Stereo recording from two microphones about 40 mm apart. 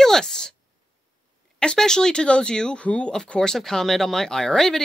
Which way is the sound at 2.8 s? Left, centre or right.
Left.